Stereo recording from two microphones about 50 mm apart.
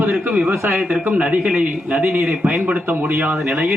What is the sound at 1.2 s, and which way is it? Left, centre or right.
A man's voice, right.